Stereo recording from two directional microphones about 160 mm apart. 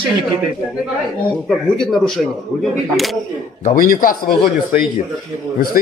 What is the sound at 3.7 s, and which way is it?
A man's voice, 65° left (ahead or behind).